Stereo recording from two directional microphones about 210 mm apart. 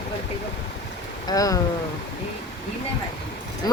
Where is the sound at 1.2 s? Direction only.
15° left (ahead or behind).